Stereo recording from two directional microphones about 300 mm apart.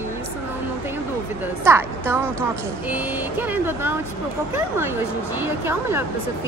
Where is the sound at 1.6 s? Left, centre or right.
Centre.